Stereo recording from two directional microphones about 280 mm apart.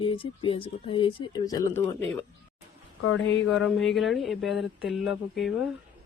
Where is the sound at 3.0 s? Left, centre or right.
Left.